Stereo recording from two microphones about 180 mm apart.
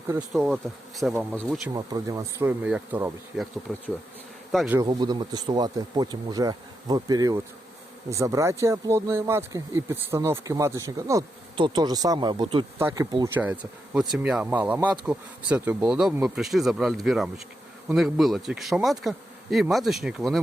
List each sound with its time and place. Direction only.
0.3 s speech: centre (ahead or behind)
1.7 s speech: 20° right (ahead or behind); by 4.8 s 5° right (ahead or behind)
4.8 s speech: 25° right (ahead or behind)
13.3 s speech: 10° right (ahead or behind)